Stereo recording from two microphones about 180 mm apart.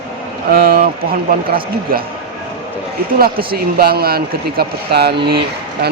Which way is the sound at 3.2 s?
55° right (ahead or behind).